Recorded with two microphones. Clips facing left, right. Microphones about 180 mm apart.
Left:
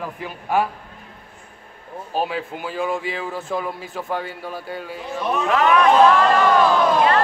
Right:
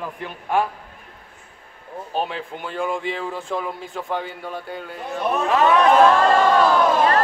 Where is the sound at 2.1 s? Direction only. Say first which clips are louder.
Left 2 dB; 5° left (ahead or behind).